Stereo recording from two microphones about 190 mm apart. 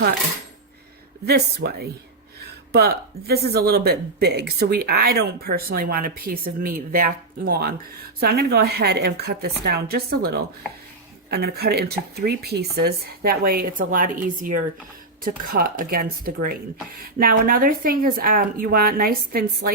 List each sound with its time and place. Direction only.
1.2 s speech: 55° right (ahead or behind)